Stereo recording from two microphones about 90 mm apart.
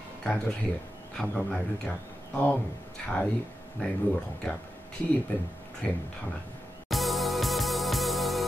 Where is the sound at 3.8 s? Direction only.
15° left (ahead or behind).